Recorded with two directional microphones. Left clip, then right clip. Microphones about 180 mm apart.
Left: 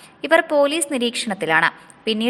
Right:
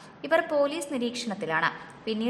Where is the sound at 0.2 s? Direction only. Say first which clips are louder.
Left 8 dB; 30° left (ahead or behind).